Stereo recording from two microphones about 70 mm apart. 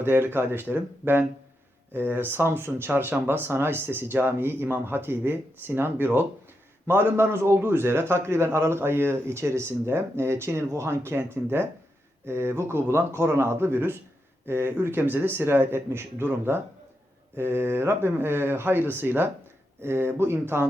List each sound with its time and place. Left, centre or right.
0.0 s a man's voice: right